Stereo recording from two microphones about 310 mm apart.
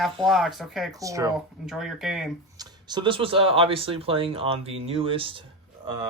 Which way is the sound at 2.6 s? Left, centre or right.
Centre.